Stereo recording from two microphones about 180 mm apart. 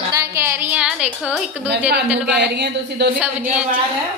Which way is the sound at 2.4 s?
70° right (ahead or behind).